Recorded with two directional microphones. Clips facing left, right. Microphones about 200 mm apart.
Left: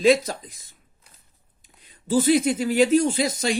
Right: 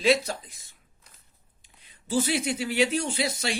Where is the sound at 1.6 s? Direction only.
45° left (ahead or behind).